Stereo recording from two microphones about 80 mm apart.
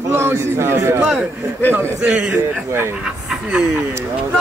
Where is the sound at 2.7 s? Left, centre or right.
Right.